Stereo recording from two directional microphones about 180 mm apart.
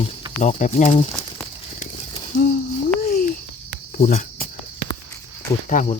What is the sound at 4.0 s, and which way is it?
Speech, 45° left (ahead or behind).